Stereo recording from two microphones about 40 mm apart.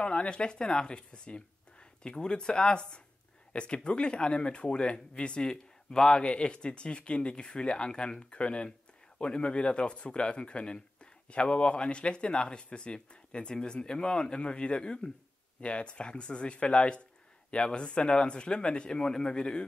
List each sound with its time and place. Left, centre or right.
0.0 s speech: left